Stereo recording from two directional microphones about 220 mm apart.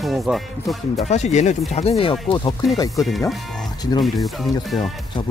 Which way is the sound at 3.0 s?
Centre (ahead or behind).